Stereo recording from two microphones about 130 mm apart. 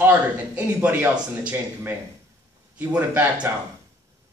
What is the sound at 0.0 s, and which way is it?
A man's voice, 15° right (ahead or behind).